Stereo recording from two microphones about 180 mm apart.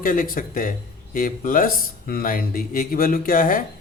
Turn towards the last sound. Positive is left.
turn(degrees=50)  # may be behind; listen again after turning